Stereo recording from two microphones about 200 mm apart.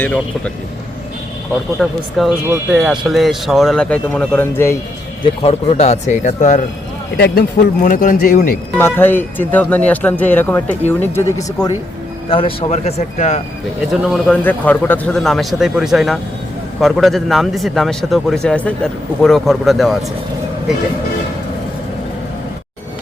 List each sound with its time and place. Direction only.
0.0 s speech: 5° left (ahead or behind)
1.8 s a man's voice: centre (ahead or behind)
5.2 s speech: 30° left (ahead or behind)
7.2 s speech: 55° left (ahead or behind)
7.8 s speech: 40° left (ahead or behind)
8.8 s speech: 10° left (ahead or behind)
12.3 s speech: 25° left (ahead or behind)
13.9 s a man's voice: 5° right (ahead or behind)
14.4 s a man's voice: 10° left (ahead or behind)